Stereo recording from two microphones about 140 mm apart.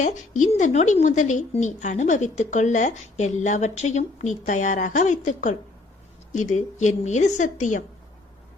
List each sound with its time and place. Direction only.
0.0 s a woman's voice: 60° left (ahead or behind)